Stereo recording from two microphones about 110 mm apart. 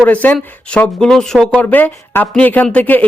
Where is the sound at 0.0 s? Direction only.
15° left (ahead or behind).